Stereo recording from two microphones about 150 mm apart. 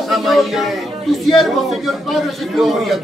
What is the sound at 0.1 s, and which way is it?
Speech, centre (ahead or behind).